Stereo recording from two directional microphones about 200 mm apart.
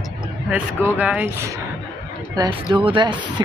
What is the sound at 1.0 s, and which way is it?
Speech, 5° right (ahead or behind).